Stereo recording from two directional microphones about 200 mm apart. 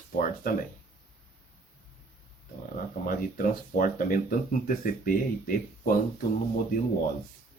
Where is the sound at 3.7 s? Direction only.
45° left (ahead or behind).